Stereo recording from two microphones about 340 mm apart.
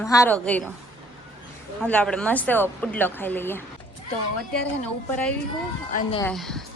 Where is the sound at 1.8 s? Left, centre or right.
Centre.